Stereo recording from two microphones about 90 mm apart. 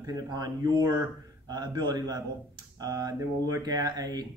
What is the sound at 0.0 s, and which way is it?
Speech, 45° right (ahead or behind).